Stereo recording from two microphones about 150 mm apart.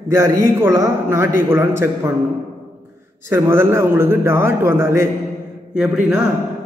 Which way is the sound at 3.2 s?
15° right (ahead or behind).